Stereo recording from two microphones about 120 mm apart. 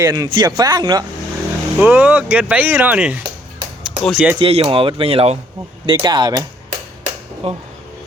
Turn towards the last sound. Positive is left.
turn(degrees=-55)  # may be behind; listen again after turning